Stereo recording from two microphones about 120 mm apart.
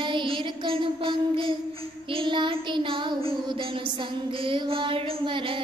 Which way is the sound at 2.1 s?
45° right (ahead or behind).